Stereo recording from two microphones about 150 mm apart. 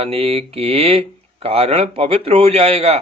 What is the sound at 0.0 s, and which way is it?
Speech, 40° right (ahead or behind).